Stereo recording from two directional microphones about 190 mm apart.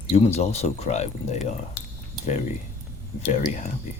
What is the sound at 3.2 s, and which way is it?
Speech, 40° left (ahead or behind).